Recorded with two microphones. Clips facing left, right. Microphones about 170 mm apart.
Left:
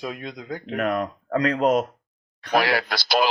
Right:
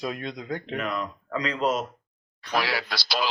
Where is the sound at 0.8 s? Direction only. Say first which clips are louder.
Left 11 dB; 50° left (ahead or behind).